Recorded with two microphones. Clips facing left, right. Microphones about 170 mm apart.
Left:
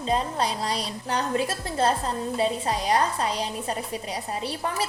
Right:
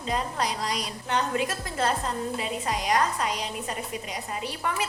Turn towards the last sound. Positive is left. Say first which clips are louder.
# left 2 dB
turn(degrees=35)  # may be behind; listen again after turning